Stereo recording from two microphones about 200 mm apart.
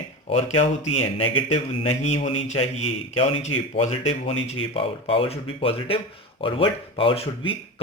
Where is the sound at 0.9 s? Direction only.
30° left (ahead or behind).